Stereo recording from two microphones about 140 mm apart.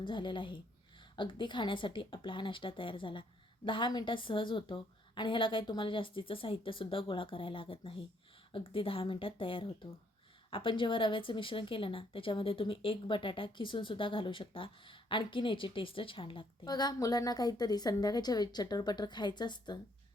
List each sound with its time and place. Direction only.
0.0 s a woman's voice: 35° left (ahead or behind)